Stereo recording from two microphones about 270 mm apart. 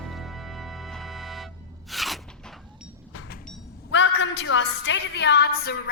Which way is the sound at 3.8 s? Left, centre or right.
Left.